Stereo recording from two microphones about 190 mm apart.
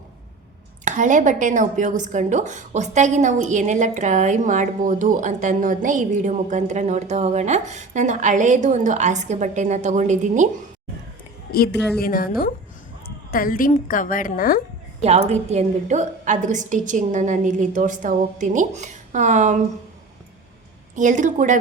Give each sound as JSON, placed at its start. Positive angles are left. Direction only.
{"t": 0.9, "sound": "a woman's voice", "side_deg": -40}
{"t": 11.5, "sound": "a woman's voice", "side_deg": 55}
{"t": 13.3, "sound": "a woman's voice", "side_deg": 50}
{"t": 15.0, "sound": "a woman's voice", "side_deg": -35}
{"t": 20.9, "sound": "a woman's voice", "side_deg": -40}